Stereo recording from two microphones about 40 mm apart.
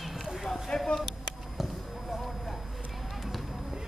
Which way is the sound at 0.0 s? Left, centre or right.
Centre.